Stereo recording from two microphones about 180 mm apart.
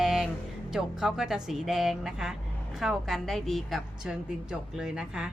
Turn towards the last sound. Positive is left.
turn(degrees=-5)  # may be behind; listen again after turning